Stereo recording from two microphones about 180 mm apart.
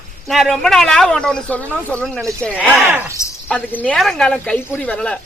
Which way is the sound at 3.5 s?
10° left (ahead or behind).